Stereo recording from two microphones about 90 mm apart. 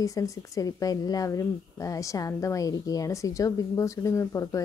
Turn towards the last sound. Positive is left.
turn(degrees=35)  # may be behind; listen again after turning